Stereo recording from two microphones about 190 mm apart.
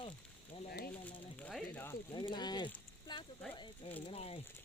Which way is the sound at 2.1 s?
25° left (ahead or behind).